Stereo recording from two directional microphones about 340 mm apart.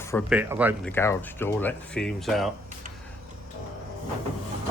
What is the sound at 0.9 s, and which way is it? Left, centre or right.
Speech, centre.